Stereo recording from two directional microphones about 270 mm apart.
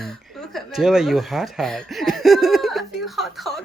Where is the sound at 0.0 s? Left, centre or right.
Centre.